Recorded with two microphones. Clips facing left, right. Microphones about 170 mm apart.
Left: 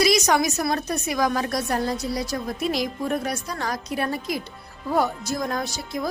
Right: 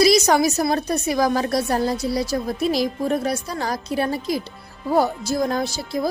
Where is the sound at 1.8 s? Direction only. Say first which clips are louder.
Right 4 dB; centre (ahead or behind).